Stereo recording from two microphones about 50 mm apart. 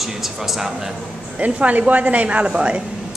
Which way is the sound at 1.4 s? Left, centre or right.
Right.